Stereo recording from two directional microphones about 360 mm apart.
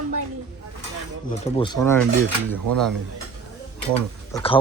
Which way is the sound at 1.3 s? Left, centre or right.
Centre.